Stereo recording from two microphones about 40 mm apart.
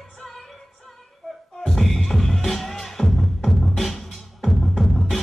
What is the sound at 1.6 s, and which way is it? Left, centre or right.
Music, centre.